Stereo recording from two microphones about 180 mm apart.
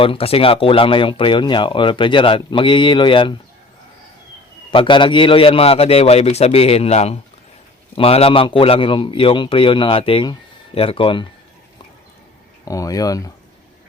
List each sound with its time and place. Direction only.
0.0 s speech: 30° left (ahead or behind)
4.7 s a man's voice: 25° left (ahead or behind)
12.6 s speech: 20° left (ahead or behind)